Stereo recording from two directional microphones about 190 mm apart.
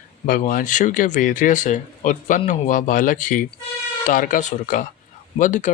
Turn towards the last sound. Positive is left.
turn(degrees=40)  # may be behind; listen again after turning